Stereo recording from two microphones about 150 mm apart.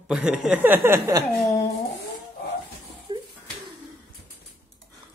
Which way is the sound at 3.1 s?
30° right (ahead or behind).